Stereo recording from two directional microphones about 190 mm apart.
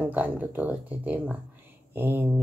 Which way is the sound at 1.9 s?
10° right (ahead or behind).